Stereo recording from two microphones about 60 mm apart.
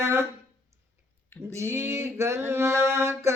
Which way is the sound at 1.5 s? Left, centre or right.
Right.